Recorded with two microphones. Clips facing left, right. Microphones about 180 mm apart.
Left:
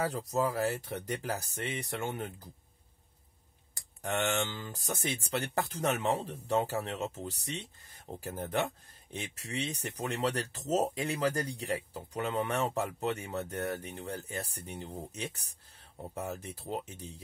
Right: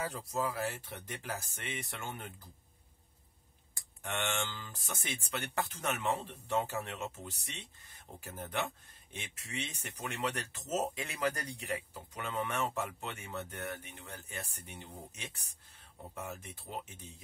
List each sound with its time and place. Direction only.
0.1 s speech: 40° left (ahead or behind)
3.7 s speech: 40° left (ahead or behind)